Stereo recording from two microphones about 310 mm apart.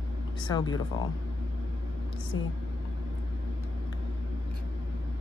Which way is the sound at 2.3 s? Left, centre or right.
Left.